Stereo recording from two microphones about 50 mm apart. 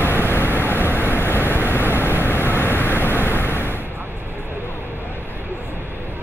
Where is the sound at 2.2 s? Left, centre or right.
Left.